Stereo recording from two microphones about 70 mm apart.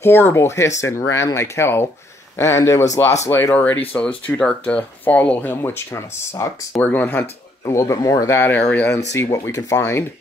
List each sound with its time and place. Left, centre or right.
0.0 s speech: left
3.5 s speech: left
5.6 s speech: left
6.3 s speech: left
6.8 s speech: left
7.6 s speech: left
8.4 s speech: left
9.5 s speech: left